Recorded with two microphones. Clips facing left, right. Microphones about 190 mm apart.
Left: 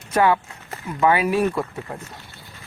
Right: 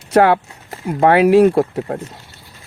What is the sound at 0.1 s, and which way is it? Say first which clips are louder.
Speech: right 6 dB; 75° right (ahead or behind).